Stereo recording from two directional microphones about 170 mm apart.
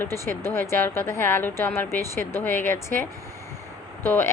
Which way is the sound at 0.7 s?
15° left (ahead or behind).